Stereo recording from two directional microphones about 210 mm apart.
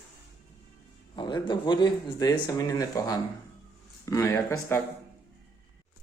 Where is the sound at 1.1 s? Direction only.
20° left (ahead or behind).